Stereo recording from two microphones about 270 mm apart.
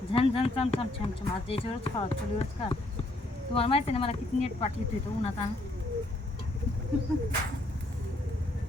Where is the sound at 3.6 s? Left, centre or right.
Left.